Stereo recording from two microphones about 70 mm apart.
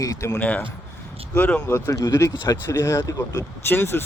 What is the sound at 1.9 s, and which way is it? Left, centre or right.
Speech, left.